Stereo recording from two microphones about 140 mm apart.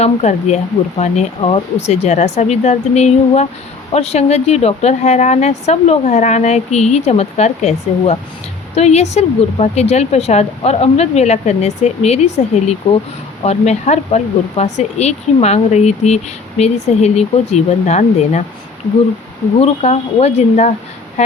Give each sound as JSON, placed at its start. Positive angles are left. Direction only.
{"t": 0.0, "sound": "speech", "side_deg": 55}
{"t": 19.5, "sound": "speech", "side_deg": 50}